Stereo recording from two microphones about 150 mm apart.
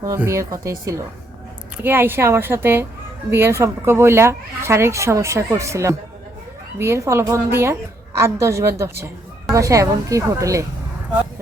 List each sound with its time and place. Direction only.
0.0 s a woman's voice: 20° right (ahead or behind)